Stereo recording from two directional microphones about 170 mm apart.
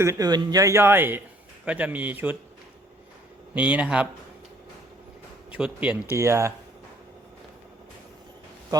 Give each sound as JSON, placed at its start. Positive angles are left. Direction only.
{"t": 0.0, "sound": "a man's voice", "side_deg": -20}
{"t": 3.5, "sound": "a man's voice", "side_deg": -5}
{"t": 5.5, "sound": "a man's voice", "side_deg": -5}
{"t": 8.7, "sound": "a man's voice", "side_deg": -20}